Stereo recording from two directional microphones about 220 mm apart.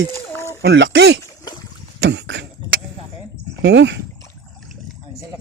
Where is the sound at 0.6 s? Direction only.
50° right (ahead or behind).